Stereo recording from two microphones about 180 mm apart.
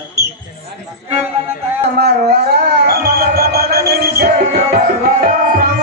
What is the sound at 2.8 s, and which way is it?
Music, 60° right (ahead or behind).